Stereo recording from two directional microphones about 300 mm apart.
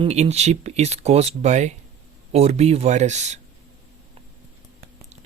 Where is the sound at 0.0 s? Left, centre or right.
Right.